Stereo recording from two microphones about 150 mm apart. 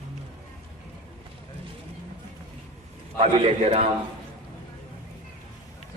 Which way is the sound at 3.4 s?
40° right (ahead or behind).